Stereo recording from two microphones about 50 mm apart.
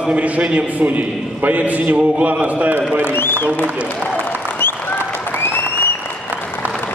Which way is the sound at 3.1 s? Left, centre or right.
Left.